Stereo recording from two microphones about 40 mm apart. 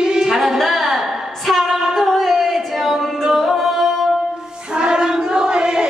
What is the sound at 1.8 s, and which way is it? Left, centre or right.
Music, centre.